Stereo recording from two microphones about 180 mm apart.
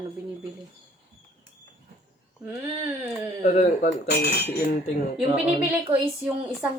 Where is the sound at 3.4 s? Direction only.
40° left (ahead or behind).